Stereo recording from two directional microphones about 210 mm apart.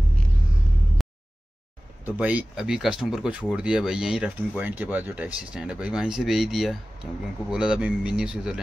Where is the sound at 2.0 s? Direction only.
5° right (ahead or behind).